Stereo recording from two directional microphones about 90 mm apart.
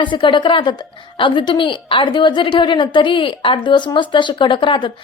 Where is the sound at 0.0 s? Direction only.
65° left (ahead or behind).